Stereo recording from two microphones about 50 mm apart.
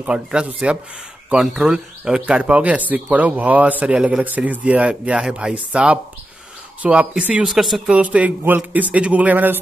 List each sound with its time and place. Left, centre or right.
0.0 s speech: centre
1.4 s a man's voice: centre
1.7 s speech: centre
3.9 s a man's voice: centre
4.2 s speech: right
7.4 s speech: centre
7.8 s a man's voice: right